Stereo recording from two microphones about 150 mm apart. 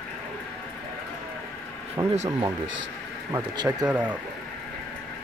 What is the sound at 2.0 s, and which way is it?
Speech, 20° right (ahead or behind).